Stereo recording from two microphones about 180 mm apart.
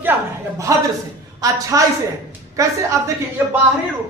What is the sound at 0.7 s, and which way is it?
Speech, 15° right (ahead or behind).